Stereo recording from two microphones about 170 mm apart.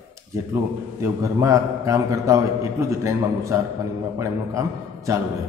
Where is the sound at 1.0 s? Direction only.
20° right (ahead or behind).